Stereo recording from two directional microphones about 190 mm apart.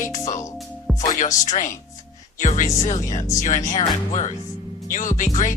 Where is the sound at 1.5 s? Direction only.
40° left (ahead or behind).